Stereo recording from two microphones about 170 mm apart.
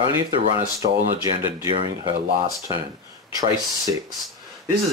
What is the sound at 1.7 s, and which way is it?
Speech, 30° right (ahead or behind).